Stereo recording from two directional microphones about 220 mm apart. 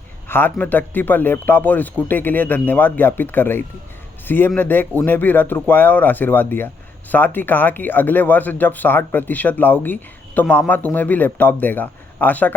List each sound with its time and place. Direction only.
0.3 s a man's voice: 10° left (ahead or behind)